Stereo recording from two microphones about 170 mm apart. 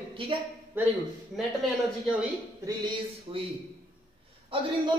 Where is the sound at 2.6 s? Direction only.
25° right (ahead or behind).